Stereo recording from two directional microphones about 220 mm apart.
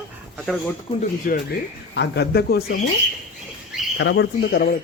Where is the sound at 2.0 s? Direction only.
45° left (ahead or behind).